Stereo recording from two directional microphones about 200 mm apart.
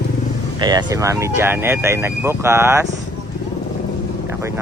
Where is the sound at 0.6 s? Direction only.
20° right (ahead or behind).